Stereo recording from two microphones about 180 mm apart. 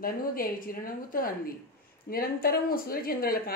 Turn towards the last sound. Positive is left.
turn(degrees=55)  # may be behind; listen again after turning